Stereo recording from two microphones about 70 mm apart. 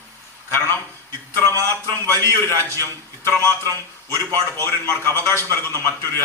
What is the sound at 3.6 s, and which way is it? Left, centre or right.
Speech, right.